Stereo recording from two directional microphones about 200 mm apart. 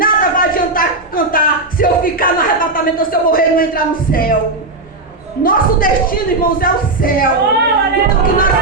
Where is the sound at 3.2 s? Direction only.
45° left (ahead or behind).